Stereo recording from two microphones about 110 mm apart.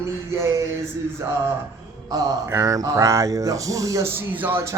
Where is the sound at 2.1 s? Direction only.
35° right (ahead or behind).